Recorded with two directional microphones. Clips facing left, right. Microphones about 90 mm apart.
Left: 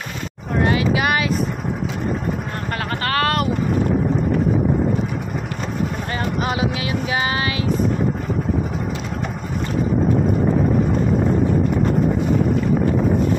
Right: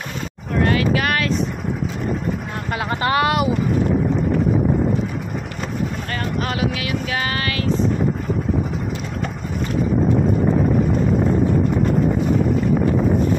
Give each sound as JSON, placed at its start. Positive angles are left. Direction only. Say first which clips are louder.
{"t": 0.6, "sound": "vehicle", "louder": "even", "side_deg": 15}
{"t": 3.0, "sound": "speech", "louder": "right 2 dB", "side_deg": -15}
{"t": 6.4, "sound": "a sound", "louder": "left 1 dB", "side_deg": 20}